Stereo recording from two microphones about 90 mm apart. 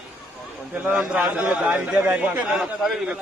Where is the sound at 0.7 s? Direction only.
20° right (ahead or behind).